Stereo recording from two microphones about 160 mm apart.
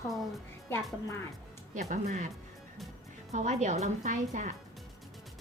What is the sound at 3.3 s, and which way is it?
A woman's voice, 50° right (ahead or behind).